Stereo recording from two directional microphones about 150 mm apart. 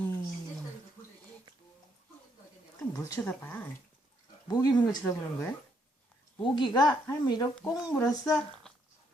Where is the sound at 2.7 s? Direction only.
20° left (ahead or behind).